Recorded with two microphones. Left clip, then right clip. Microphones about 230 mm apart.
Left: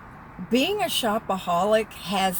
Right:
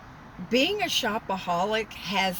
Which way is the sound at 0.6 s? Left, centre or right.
Centre.